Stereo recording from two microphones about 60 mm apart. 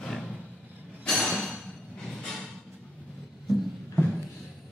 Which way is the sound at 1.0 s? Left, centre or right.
Centre.